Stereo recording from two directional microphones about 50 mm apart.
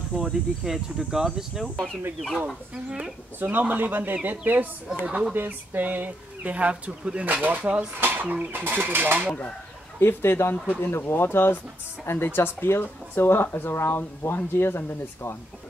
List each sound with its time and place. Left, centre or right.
0.1 s speech: centre
2.7 s speech: right
3.3 s speech: right
5.0 s speech: right
5.3 s speech: right
7.2 s speech: right
8.0 s speech: right
9.9 s speech: left